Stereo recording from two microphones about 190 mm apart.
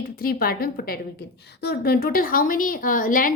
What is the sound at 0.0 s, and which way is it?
A woman's voice, 50° left (ahead or behind).